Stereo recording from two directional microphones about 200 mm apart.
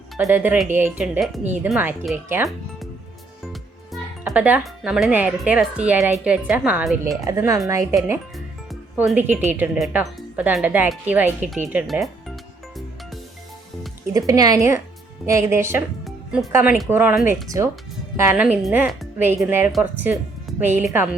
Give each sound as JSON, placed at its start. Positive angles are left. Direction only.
{"t": 0.2, "sound": "speech", "side_deg": -10}
{"t": 3.4, "sound": "speech", "side_deg": 0}
{"t": 7.3, "sound": "speech", "side_deg": -15}
{"t": 8.7, "sound": "speech", "side_deg": -5}
{"t": 14.1, "sound": "speech", "side_deg": -15}
{"t": 16.0, "sound": "music", "side_deg": 0}
{"t": 16.5, "sound": "speech", "side_deg": -10}